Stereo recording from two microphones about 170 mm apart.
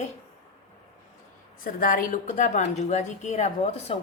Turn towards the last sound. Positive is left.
turn(degrees=40)  # may be behind; listen again after turning